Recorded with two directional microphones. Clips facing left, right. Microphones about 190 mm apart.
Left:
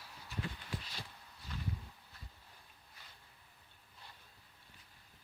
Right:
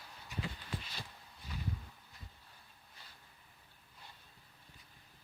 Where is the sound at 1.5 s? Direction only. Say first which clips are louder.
Right 1 dB; 10° right (ahead or behind).